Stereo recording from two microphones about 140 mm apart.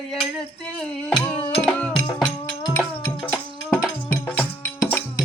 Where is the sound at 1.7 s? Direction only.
10° left (ahead or behind).